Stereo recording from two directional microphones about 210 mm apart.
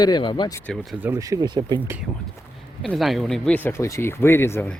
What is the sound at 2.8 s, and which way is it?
Speech, centre (ahead or behind).